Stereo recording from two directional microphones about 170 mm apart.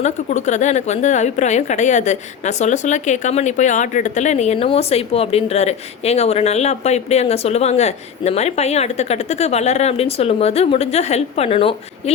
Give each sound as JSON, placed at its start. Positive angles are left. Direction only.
{"t": 0.0, "sound": "a woman's voice", "side_deg": 45}